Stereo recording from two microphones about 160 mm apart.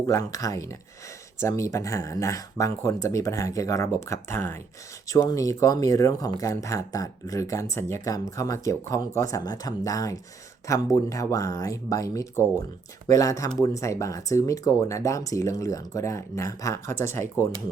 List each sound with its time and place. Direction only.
0.0 s speech: 20° left (ahead or behind)